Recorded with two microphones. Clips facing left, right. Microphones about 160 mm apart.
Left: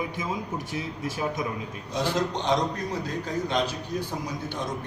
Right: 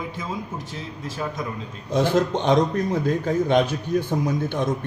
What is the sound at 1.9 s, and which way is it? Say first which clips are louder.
A man's voice: right 7 dB; 55° right (ahead or behind).